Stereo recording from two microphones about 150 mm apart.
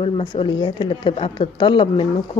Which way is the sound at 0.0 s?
35° left (ahead or behind).